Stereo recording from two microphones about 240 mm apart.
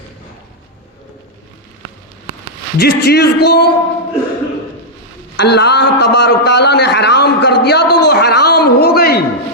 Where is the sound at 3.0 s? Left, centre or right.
Left.